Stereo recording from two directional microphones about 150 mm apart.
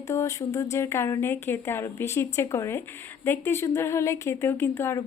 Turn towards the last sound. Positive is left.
turn(degrees=15)  # may be behind; listen again after turning